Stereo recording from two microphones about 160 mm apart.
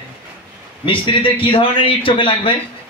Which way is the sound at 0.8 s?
30° left (ahead or behind).